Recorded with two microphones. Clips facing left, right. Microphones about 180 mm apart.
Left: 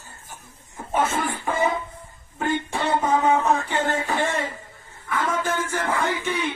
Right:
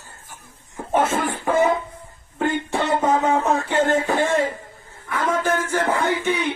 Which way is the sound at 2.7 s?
50° right (ahead or behind).